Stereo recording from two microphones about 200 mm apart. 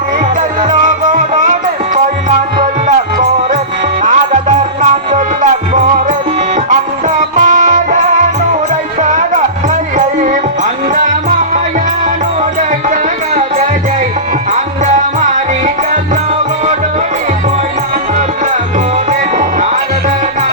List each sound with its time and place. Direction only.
0.7 s music: 40° right (ahead or behind)
2.6 s music: 40° right (ahead or behind)
7.3 s music: 40° right (ahead or behind)
14.5 s music: 40° right (ahead or behind)
19.4 s music: 35° right (ahead or behind)